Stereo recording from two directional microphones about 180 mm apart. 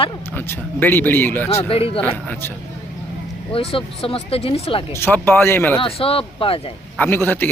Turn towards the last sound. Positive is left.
turn(degrees=10)  # may be behind; listen again after turning